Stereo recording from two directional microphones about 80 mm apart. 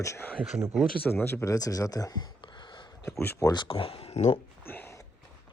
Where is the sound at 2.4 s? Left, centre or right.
Left.